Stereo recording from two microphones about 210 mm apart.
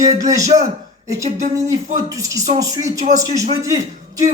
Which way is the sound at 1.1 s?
15° right (ahead or behind).